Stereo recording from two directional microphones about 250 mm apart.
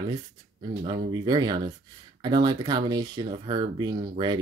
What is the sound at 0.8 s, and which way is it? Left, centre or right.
Speech, centre.